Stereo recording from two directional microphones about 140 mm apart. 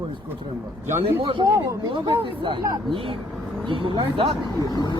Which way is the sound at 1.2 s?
35° right (ahead or behind).